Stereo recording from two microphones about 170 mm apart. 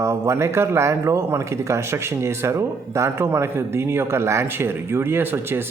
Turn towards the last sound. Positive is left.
turn(degrees=-15)  # may be behind; listen again after turning